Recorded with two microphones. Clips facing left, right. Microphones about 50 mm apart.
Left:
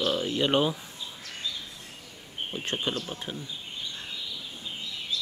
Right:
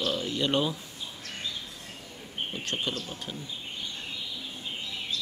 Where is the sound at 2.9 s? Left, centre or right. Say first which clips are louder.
Left 2 dB; left.